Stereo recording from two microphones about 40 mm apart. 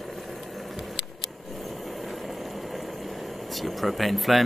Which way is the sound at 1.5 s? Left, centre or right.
Centre.